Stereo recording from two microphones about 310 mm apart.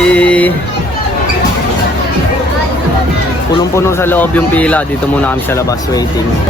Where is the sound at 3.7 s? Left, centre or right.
Centre.